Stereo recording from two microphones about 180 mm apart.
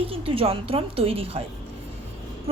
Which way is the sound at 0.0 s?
30° right (ahead or behind).